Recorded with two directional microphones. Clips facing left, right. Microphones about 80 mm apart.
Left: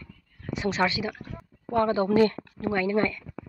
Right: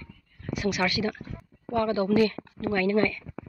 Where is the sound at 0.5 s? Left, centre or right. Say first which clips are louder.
Left 1 dB; left.